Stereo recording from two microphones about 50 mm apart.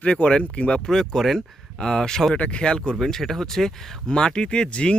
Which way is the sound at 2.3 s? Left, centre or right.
Left.